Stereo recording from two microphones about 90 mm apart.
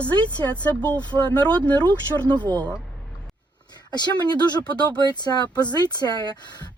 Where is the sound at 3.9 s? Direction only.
50° left (ahead or behind).